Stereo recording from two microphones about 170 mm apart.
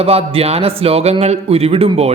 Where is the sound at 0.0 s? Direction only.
35° right (ahead or behind).